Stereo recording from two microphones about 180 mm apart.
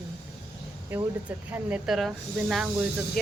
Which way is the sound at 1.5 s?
10° right (ahead or behind).